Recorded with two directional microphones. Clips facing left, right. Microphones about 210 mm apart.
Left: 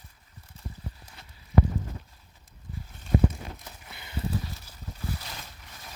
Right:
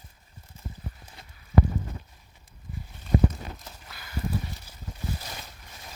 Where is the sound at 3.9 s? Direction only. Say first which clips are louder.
Even; 20° left (ahead or behind).